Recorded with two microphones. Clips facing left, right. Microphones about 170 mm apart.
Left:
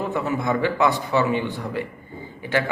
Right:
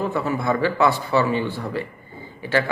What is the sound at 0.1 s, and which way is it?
Speech, 20° left (ahead or behind).